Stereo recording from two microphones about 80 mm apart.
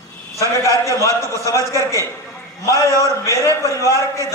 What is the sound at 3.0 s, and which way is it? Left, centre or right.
A man's voice, left.